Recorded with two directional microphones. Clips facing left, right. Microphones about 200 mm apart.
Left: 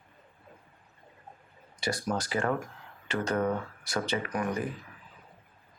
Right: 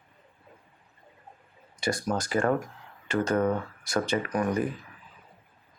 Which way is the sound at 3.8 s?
45° right (ahead or behind).